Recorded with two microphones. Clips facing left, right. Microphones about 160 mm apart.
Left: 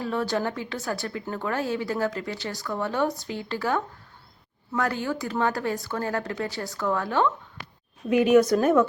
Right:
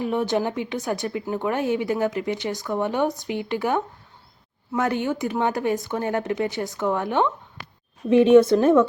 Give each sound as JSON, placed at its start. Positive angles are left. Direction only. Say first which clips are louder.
{"t": 0.0, "sound": "speech", "louder": "right 4 dB", "side_deg": -20}